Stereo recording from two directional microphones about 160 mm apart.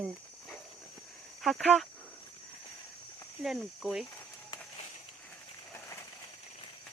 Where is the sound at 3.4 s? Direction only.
Centre (ahead or behind).